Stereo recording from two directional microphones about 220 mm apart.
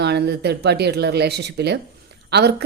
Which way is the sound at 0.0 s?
50° right (ahead or behind).